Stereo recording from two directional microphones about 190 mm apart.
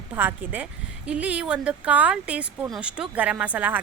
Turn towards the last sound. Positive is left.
turn(degrees=-10)  # may be behind; listen again after turning